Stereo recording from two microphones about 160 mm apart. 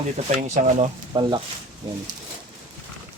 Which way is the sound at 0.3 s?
45° right (ahead or behind).